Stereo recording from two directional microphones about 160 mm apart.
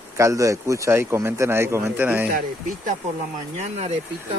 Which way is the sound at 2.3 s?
65° right (ahead or behind).